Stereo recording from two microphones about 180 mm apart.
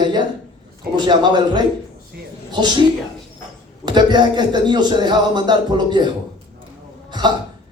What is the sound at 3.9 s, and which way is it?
A man's voice, 25° right (ahead or behind).